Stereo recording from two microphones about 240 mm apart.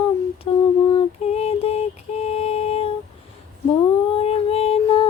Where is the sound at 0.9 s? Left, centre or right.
Left.